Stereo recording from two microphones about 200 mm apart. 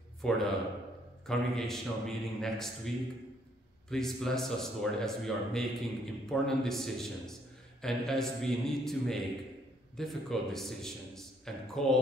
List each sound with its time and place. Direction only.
0.2 s a man's voice: centre (ahead or behind)
3.9 s a man's voice: centre (ahead or behind)